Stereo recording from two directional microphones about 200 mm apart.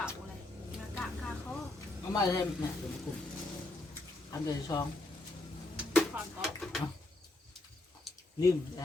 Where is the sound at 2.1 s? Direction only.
15° left (ahead or behind).